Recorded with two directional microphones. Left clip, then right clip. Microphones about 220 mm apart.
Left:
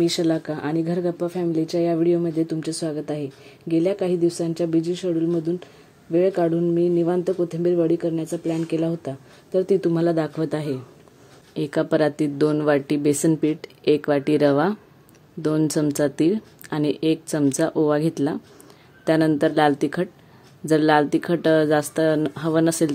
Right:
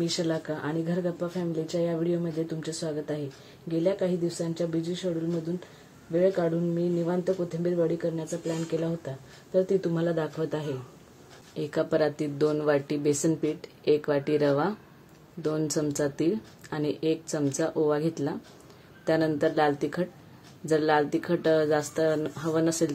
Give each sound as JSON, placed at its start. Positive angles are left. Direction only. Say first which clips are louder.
{"t": 0.0, "sound": "speech", "louder": "left 8 dB", "side_deg": 50}
{"t": 6.1, "sound": "speech", "louder": "left 5 dB", "side_deg": 50}